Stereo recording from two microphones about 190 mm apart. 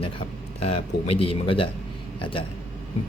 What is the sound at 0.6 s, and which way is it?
Speech, 30° left (ahead or behind).